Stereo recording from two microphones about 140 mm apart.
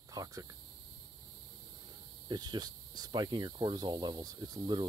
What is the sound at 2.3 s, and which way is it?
Speech, 30° right (ahead or behind).